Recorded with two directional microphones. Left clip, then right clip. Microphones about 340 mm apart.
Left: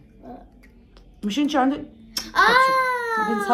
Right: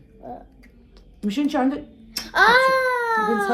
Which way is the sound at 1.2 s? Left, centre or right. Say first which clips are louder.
Left 1 dB; centre.